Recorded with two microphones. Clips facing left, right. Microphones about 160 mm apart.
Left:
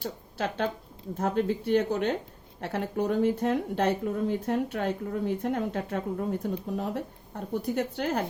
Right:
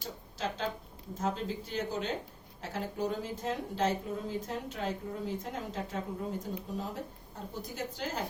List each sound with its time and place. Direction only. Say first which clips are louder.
0.0 s speech: left 5 dB; 60° left (ahead or behind)